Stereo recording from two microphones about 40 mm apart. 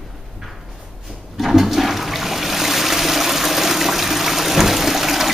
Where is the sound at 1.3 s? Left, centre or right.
Centre.